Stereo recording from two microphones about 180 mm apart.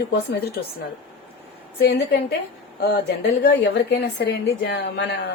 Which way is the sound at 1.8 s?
65° left (ahead or behind).